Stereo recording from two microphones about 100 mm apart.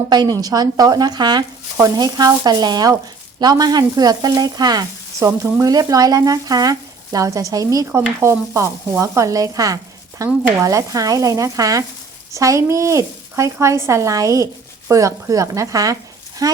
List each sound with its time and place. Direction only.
0.1 s a woman's voice: 40° right (ahead or behind)